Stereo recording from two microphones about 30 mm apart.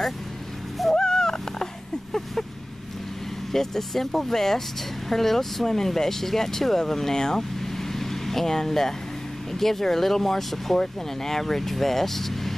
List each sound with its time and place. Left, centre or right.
0.9 s owl: left
3.5 s speech: centre